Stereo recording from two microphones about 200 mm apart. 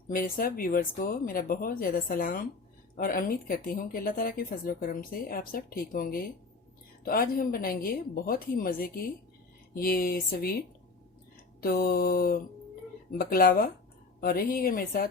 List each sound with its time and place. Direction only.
0.1 s speech: 45° left (ahead or behind)
11.6 s speech: 50° left (ahead or behind)